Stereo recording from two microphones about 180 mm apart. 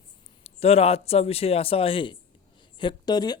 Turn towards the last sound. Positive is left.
turn(degrees=20)  # may be behind; listen again after turning